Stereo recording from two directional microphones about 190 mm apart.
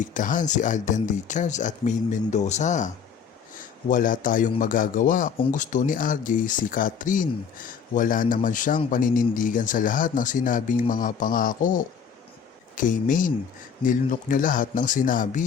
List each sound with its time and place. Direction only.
0.0 s a man's voice: 45° left (ahead or behind)